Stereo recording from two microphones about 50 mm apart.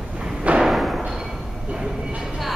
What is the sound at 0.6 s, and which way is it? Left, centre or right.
Thump, centre.